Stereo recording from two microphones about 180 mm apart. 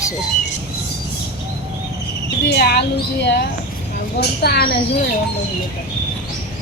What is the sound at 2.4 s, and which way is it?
Speech, 60° left (ahead or behind).